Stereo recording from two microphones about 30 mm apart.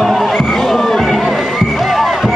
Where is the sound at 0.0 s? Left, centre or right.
Centre.